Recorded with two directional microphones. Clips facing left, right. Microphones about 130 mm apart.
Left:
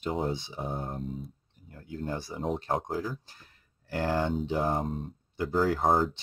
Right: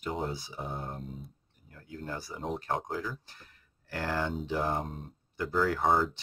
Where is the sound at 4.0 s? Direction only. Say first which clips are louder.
Left 4 dB; 25° left (ahead or behind).